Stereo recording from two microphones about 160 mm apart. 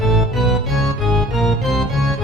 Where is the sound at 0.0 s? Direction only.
Centre (ahead or behind).